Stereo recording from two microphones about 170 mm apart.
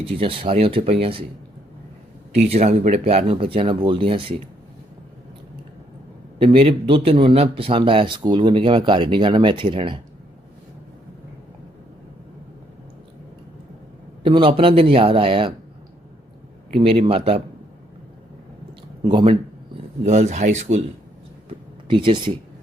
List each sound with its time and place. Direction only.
0.0 s speech: 30° right (ahead or behind)
2.5 s speech: 40° right (ahead or behind)
6.4 s speech: 35° right (ahead or behind)
14.3 s speech: 30° right (ahead or behind)
16.7 s speech: 35° right (ahead or behind)
19.0 s speech: 30° right (ahead or behind)
20.1 s speech: 40° right (ahead or behind)
21.8 s speech: 30° right (ahead or behind)